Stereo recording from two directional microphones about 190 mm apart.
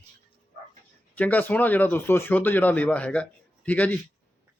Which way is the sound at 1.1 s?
10° left (ahead or behind).